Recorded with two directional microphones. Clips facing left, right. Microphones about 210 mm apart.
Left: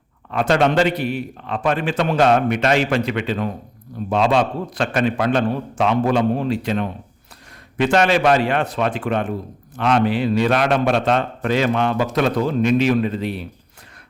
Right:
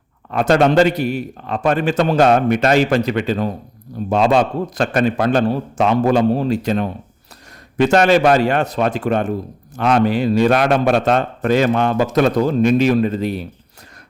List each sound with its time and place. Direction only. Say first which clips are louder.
0.3 s a man's voice: right 3 dB; 40° right (ahead or behind)